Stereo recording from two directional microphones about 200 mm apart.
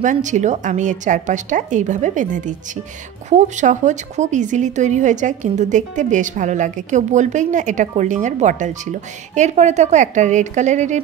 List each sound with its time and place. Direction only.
0.0 s speech: 40° right (ahead or behind)